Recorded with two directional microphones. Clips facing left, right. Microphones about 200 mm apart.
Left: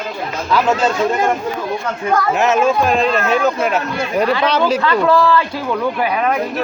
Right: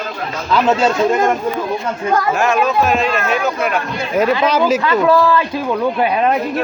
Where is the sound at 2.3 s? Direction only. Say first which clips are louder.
Left 1 dB; 20° left (ahead or behind).